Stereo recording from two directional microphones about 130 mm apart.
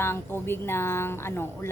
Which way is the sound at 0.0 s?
20° left (ahead or behind).